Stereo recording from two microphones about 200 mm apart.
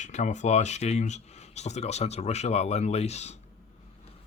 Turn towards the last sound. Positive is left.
turn(degrees=35)  # may be behind; listen again after turning